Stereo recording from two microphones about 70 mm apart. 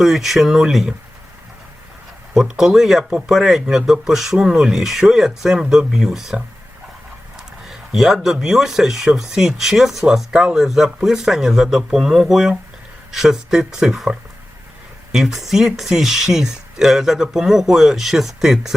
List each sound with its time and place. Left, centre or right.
0.0 s speech: centre
2.3 s speech: centre